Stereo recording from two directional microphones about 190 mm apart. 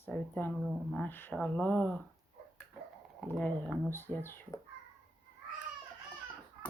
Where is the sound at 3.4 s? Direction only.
5° left (ahead or behind).